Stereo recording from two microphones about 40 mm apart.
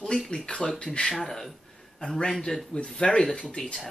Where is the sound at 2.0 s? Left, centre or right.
Left.